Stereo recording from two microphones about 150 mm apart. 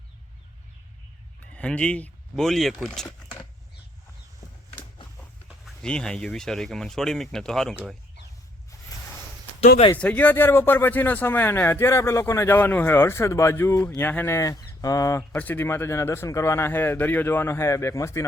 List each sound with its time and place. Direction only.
1.5 s speech: 10° left (ahead or behind)
5.5 s speech: centre (ahead or behind)
9.9 s speech: 10° left (ahead or behind)
15.3 s speech: 10° left (ahead or behind)